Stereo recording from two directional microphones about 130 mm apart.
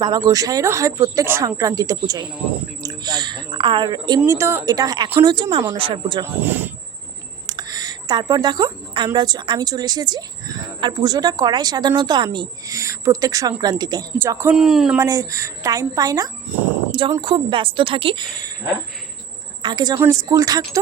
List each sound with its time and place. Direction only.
0.0 s a woman's voice: 30° right (ahead or behind)
4.3 s a woman's voice: 20° right (ahead or behind); by 6.2 s 40° right (ahead or behind)
6.4 s speech: 15° right (ahead or behind)
7.4 s speech: 30° right (ahead or behind)
12.7 s a woman's voice: 25° right (ahead or behind)
14.2 s speech: 20° right (ahead or behind)
14.5 s speech: 5° right (ahead or behind)
14.9 s speech: 25° right (ahead or behind)
17.2 s a woman's voice: 40° right (ahead or behind)
19.6 s a woman's voice: 35° right (ahead or behind)